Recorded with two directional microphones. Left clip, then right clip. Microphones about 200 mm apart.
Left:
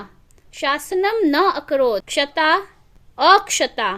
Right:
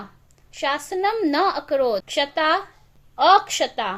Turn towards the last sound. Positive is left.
turn(degrees=35)  # may be behind; listen again after turning